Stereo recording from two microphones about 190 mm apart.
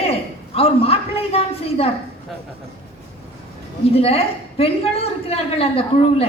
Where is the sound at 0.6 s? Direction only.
30° left (ahead or behind).